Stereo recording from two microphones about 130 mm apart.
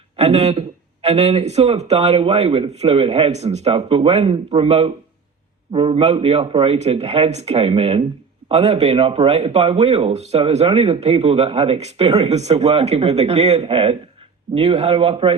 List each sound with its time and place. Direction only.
0.2 s a man's voice: 55° right (ahead or behind)